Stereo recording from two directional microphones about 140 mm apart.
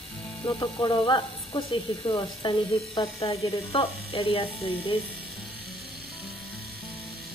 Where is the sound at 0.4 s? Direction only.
20° left (ahead or behind).